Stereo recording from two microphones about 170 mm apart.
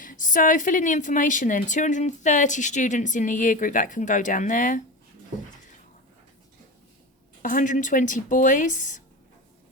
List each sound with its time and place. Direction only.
0.0 s a woman's voice: 50° left (ahead or behind)
7.4 s a woman's voice: 50° left (ahead or behind)